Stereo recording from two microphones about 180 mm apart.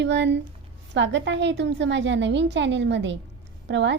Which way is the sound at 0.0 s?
85° right.